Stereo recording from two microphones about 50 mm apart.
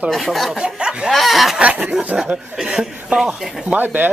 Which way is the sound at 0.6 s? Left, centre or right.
Centre.